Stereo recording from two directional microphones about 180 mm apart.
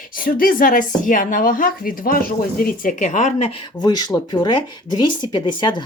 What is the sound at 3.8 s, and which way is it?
Speech, 20° left (ahead or behind).